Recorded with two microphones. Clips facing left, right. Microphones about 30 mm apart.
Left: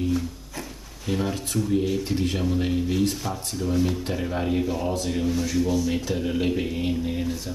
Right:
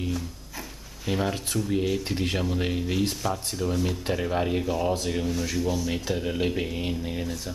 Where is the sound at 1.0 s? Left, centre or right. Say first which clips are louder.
Left 1 dB; centre.